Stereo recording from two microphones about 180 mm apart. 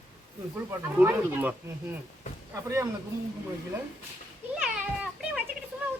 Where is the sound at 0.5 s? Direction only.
10° right (ahead or behind).